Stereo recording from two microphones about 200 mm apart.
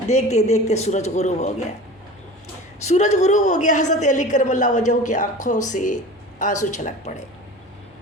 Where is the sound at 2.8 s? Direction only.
35° left (ahead or behind).